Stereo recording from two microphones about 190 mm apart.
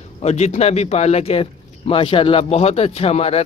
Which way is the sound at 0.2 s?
35° left (ahead or behind).